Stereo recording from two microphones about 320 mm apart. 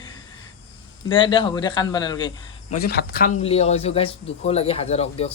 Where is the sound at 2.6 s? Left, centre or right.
Left.